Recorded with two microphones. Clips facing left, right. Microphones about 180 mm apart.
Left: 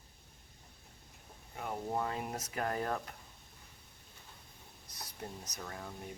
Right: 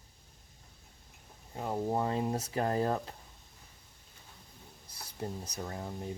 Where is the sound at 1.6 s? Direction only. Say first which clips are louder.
Right 5 dB; 30° right (ahead or behind).